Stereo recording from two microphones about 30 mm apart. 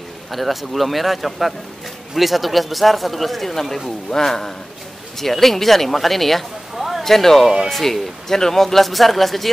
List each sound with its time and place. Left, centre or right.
0.3 s speech: centre
6.7 s a sound: centre
7.0 s speech: centre
7.4 s speech: centre
7.8 s speech: centre